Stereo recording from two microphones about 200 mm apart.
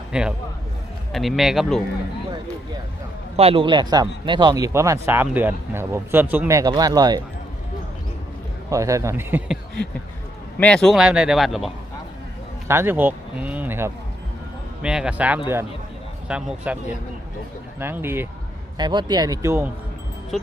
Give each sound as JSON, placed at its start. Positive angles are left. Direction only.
{"t": 0.1, "sound": "a man's voice", "side_deg": -5}
{"t": 3.3, "sound": "speech", "side_deg": -30}
{"t": 8.7, "sound": "speech", "side_deg": -15}
{"t": 10.6, "sound": "speech", "side_deg": 5}
{"t": 12.6, "sound": "speech", "side_deg": -10}
{"t": 17.7, "sound": "speech", "side_deg": -10}
{"t": 18.8, "sound": "speech", "side_deg": -20}